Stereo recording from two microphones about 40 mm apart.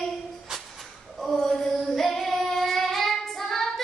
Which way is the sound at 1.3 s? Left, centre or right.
Centre.